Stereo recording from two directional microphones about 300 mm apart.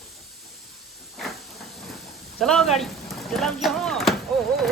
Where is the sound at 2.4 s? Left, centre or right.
Centre.